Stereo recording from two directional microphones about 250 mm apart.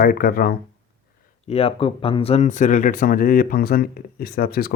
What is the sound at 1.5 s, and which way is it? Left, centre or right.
Speech, left.